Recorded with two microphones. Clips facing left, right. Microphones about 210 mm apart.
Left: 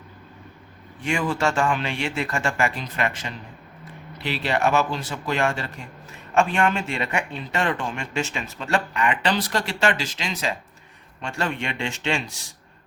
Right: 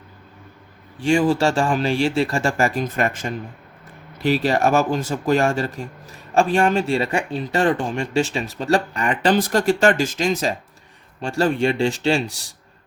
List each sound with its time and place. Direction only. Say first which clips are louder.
0.9 s speech: right 8 dB; 35° right (ahead or behind)